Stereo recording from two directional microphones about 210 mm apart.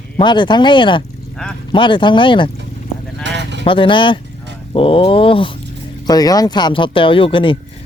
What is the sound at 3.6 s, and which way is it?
Speech, 25° left (ahead or behind).